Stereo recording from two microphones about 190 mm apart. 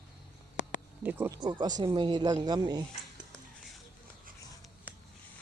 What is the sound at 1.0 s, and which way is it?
Speech, 10° right (ahead or behind).